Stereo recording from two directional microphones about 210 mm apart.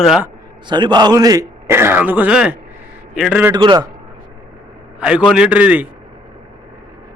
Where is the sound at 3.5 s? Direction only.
20° right (ahead or behind).